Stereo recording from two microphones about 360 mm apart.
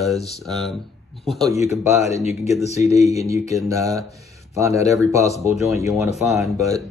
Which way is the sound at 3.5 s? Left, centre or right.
Centre.